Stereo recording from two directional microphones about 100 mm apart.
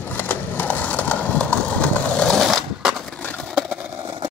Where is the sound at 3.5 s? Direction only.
5° right (ahead or behind).